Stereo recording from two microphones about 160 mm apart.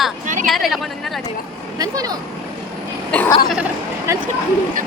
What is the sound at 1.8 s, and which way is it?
Speech, 20° right (ahead or behind).